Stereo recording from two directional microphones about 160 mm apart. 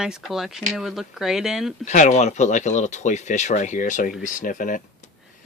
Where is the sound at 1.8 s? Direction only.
50° left (ahead or behind).